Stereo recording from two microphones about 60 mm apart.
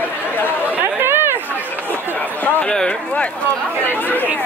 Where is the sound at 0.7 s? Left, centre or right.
Right.